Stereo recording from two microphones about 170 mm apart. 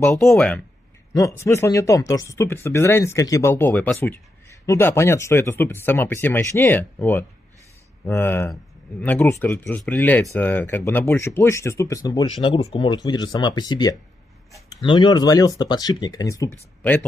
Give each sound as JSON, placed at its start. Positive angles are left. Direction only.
{"t": 0.3, "sound": "speech", "side_deg": 5}
{"t": 1.1, "sound": "speech", "side_deg": 15}